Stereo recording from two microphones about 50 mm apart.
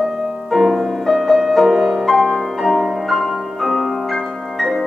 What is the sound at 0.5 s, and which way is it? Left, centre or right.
Music, centre.